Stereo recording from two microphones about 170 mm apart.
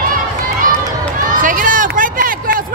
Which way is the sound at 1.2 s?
50° right (ahead or behind).